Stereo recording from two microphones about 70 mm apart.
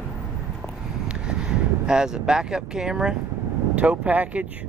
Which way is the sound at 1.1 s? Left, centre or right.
Centre.